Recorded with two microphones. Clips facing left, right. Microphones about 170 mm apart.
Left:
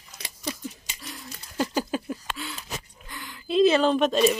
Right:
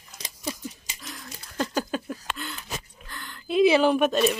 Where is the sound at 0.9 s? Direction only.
Centre (ahead or behind).